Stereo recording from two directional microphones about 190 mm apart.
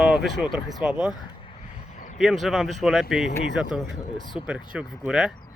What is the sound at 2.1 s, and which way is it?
Speech, centre (ahead or behind).